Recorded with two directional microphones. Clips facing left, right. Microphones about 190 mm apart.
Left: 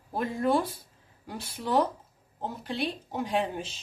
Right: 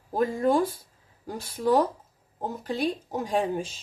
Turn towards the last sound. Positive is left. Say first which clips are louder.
# right 3 dB
turn(degrees=-50)  # may be behind; listen again after turning